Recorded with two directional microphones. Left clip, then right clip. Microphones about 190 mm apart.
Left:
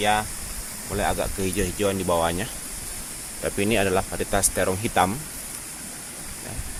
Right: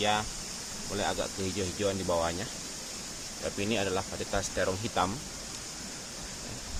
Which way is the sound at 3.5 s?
60° left (ahead or behind).